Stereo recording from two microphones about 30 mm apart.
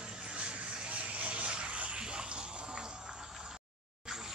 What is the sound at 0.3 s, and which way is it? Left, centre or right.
Vehicle, right.